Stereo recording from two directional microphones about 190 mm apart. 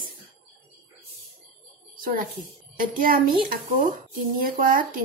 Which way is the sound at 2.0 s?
50° right (ahead or behind).